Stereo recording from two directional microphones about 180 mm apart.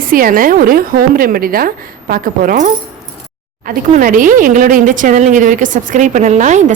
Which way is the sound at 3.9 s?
50° right (ahead or behind).